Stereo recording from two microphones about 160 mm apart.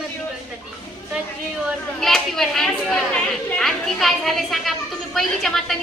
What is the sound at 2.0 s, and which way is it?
A woman's voice, centre (ahead or behind).